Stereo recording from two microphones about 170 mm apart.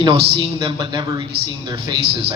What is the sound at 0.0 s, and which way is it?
A man's voice, 30° right (ahead or behind).